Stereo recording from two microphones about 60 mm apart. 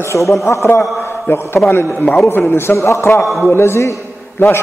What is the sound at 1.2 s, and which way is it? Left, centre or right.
A man's voice, left.